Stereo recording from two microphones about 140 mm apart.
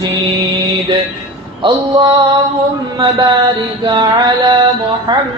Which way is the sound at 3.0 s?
30° right (ahead or behind).